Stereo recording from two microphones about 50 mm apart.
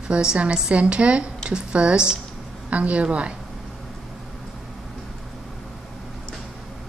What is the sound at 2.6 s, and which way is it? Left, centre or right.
Speech, right.